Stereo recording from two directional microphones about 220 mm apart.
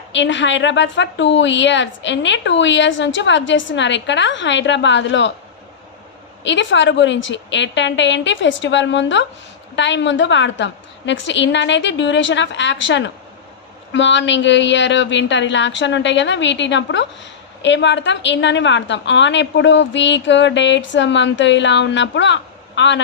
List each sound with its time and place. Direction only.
0.1 s a woman's voice: 55° left (ahead or behind)
6.4 s a woman's voice: 55° left (ahead or behind)